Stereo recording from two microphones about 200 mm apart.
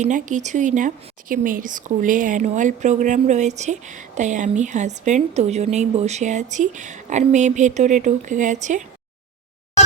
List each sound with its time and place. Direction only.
0.0 s speech: 40° right (ahead or behind)